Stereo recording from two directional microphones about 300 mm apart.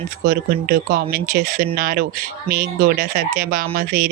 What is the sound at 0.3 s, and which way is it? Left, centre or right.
Speech, right.